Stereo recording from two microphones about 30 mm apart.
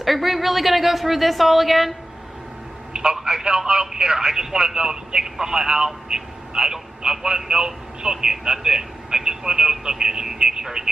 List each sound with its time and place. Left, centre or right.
0.0 s speech: centre
2.9 s telephone: right
3.2 s speech: centre
3.4 s speech: right